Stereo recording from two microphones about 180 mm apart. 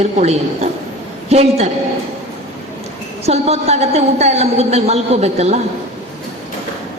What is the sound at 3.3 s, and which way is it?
A woman's voice, 35° right (ahead or behind).